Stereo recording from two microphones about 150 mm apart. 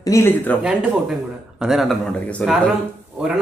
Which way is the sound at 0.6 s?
10° right (ahead or behind).